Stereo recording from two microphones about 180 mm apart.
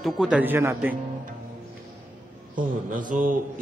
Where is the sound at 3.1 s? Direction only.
50° right (ahead or behind).